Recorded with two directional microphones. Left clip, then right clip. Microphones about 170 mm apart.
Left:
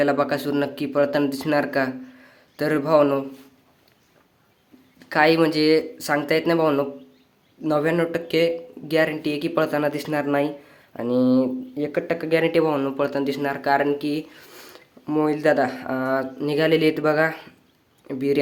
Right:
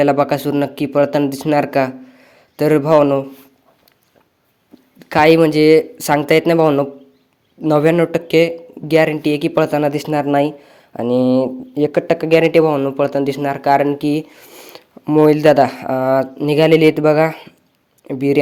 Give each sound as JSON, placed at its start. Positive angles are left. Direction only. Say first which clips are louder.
{"t": 0.0, "sound": "speech", "louder": "right 7 dB", "side_deg": -40}
{"t": 4.9, "sound": "speech", "louder": "right 7 dB", "side_deg": -45}